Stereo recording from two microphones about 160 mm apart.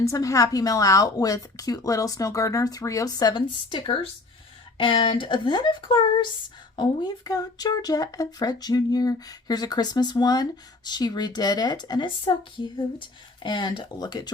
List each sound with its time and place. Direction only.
0.0 s speech: 20° left (ahead or behind)